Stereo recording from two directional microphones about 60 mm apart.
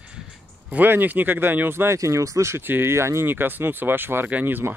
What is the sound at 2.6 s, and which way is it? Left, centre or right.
Speech, right.